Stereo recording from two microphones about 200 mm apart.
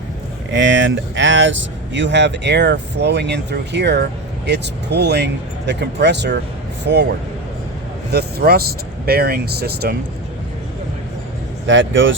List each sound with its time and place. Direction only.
0.5 s speech: 65° right (ahead or behind)
8.1 s speech: 50° right (ahead or behind)
11.6 s speech: 70° right (ahead or behind)